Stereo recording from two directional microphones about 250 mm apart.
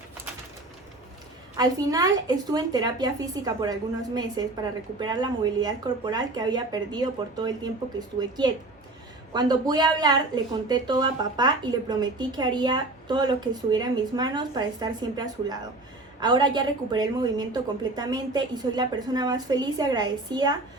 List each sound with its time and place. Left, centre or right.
1.5 s a woman's voice: centre